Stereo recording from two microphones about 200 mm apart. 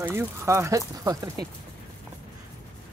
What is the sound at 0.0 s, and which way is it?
Speech, 15° right (ahead or behind).